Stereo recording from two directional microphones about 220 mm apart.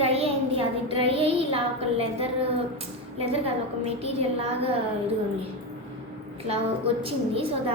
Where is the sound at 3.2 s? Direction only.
25° right (ahead or behind).